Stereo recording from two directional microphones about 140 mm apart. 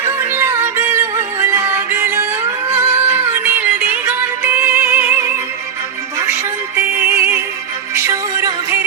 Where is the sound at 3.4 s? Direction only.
15° right (ahead or behind).